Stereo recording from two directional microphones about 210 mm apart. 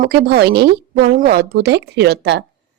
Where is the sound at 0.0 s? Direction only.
50° right (ahead or behind).